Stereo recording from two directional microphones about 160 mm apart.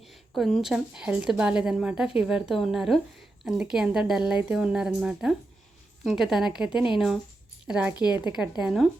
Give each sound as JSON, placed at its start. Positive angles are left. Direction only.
{"t": 0.0, "sound": "a woman's voice", "side_deg": 0}